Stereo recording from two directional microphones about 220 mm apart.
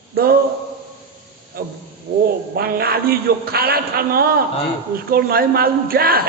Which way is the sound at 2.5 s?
45° right (ahead or behind).